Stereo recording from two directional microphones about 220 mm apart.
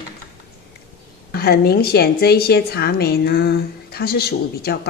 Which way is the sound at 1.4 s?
45° left (ahead or behind).